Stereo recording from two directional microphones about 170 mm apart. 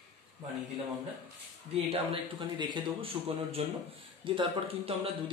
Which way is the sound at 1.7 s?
30° right (ahead or behind).